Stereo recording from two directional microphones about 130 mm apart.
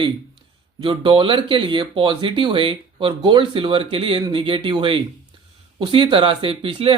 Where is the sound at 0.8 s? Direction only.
40° right (ahead or behind).